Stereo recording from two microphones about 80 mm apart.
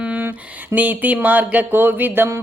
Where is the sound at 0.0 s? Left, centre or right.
Right.